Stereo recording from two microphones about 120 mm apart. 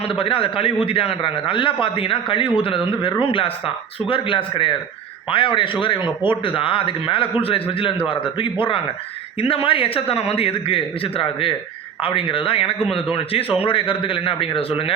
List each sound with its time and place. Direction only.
0.0 s a man's voice: 50° left (ahead or behind)